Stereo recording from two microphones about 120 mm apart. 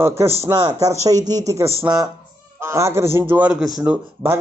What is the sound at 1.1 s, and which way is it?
A man's voice, 30° right (ahead or behind).